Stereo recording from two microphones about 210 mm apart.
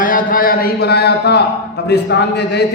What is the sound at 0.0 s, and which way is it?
A man's voice, 40° left (ahead or behind).